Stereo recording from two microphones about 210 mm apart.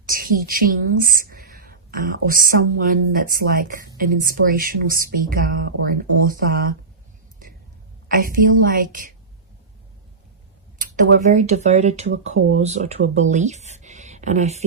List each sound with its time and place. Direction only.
0.1 s a woman's voice: 45° right (ahead or behind)
8.0 s speech: 40° right (ahead or behind)
10.8 s speech: 40° right (ahead or behind)
13.7 s a sound: 35° right (ahead or behind)